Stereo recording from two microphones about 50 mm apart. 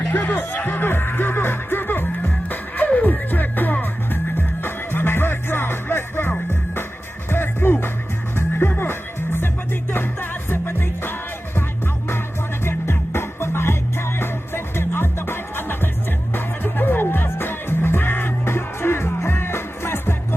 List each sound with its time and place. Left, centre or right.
0.0 s music: left
12.6 s music: left